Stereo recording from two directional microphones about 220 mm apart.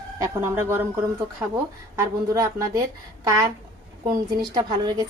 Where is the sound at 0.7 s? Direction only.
10° right (ahead or behind).